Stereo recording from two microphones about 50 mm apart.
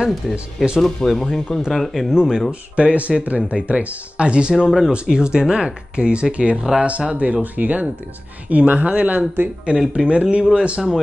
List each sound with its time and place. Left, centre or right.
0.1 s speech: centre
2.0 s speech: centre
2.7 s speech: right
4.6 s speech: centre
5.1 s speech: centre
6.5 s speech: centre
6.8 s speech: right